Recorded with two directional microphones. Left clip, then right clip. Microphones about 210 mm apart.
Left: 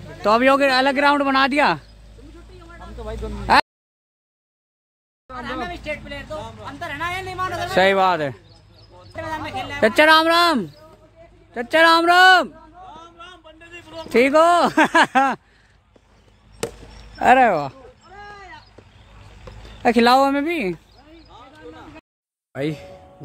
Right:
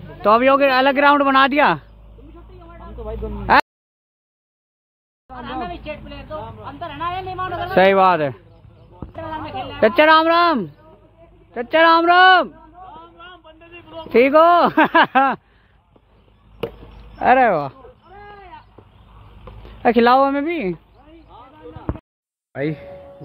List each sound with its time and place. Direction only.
0.2 s speech: 20° left (ahead or behind)
3.5 s speech: 15° left (ahead or behind)
5.3 s a sound: 5° left (ahead or behind)
7.0 s speech: 15° left (ahead or behind)
9.1 s a sound: 50° left (ahead or behind)
9.8 s speech: 15° left (ahead or behind)
11.5 s a sound: 15° left (ahead or behind)
13.8 s speech: 10° left (ahead or behind)
17.2 s a man's voice: 20° left (ahead or behind)
19.8 s a man's voice: 15° left (ahead or behind)
21.3 s a sound: 15° left (ahead or behind)
22.5 s speech: 10° left (ahead or behind)